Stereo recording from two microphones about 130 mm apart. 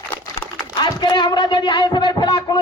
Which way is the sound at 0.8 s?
35° left (ahead or behind).